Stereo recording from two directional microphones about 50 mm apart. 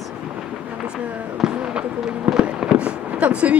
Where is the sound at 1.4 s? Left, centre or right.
Centre.